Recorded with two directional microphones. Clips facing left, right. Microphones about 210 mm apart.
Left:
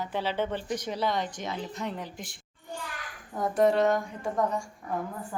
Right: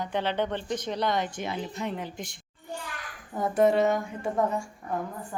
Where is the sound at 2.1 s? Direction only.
Centre (ahead or behind).